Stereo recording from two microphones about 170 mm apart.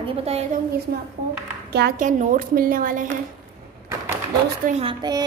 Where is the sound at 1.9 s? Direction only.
50° right (ahead or behind).